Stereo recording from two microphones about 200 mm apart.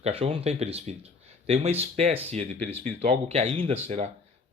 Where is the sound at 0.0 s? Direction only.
30° right (ahead or behind).